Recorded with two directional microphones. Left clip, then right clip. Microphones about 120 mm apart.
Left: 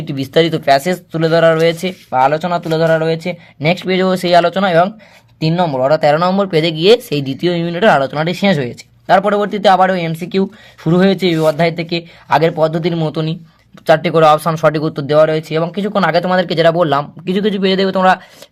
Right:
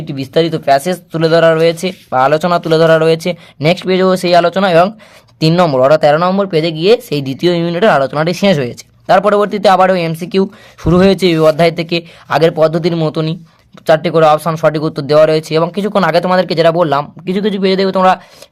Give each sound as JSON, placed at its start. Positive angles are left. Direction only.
{"t": 0.0, "sound": "speech", "side_deg": -5}
{"t": 1.9, "sound": "speech", "side_deg": -30}
{"t": 2.3, "sound": "speech", "side_deg": -40}
{"t": 3.6, "sound": "speech", "side_deg": -25}
{"t": 5.4, "sound": "speech", "side_deg": -50}
{"t": 6.0, "sound": "speech", "side_deg": -20}
{"t": 7.1, "sound": "speech", "side_deg": -15}